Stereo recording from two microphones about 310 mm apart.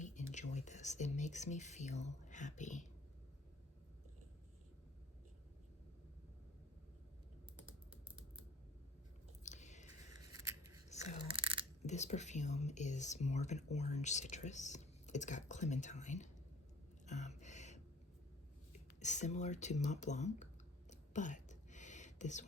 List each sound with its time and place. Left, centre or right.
0.0 s speech: left
9.4 s biting: left
10.1 s scissors: centre
10.8 s toothbrush: left
11.9 s speech: left
17.1 s a sound: left
18.7 s speech: left
20.9 s whispering: left